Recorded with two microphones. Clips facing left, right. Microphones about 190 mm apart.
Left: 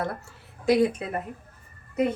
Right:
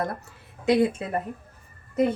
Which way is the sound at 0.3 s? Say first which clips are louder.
Even; 20° right (ahead or behind).